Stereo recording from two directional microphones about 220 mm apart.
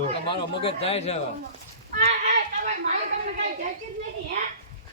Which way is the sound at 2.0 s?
35° right (ahead or behind).